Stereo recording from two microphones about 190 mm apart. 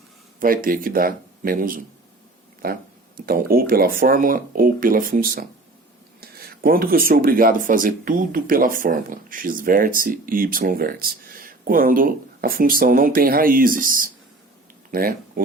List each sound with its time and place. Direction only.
0.3 s speech: 45° right (ahead or behind)
3.2 s speech: 50° right (ahead or behind)